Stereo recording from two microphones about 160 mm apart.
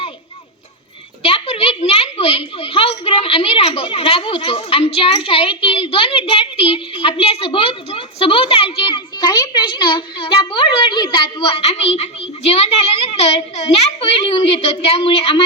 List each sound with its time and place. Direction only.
1.2 s a child's voice: 40° left (ahead or behind)